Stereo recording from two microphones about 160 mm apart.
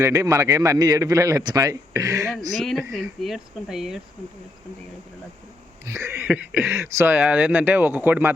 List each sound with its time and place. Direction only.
0.0 s a man's voice: 20° right (ahead or behind)
2.6 s speech: centre (ahead or behind)
5.8 s speech: 20° right (ahead or behind)